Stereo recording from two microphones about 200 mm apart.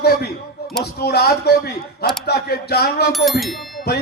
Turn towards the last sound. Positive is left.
turn(degrees=0)  # may be behind; listen again after turning